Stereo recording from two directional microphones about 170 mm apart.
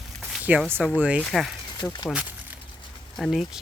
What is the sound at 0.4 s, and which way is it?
Speech, 10° right (ahead or behind).